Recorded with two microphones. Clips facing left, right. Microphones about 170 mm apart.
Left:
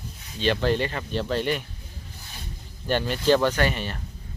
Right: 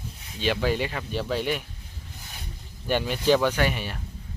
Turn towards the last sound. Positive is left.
turn(degrees=-10)  # may be behind; listen again after turning